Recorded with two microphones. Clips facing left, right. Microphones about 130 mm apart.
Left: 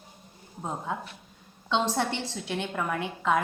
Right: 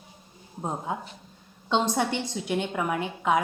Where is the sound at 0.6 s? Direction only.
20° right (ahead or behind).